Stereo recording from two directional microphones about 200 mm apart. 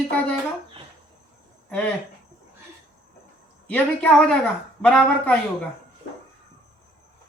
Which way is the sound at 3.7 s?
5° left (ahead or behind).